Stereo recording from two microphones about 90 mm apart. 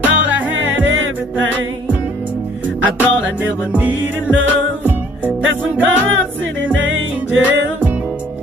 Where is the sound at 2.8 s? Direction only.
15° right (ahead or behind).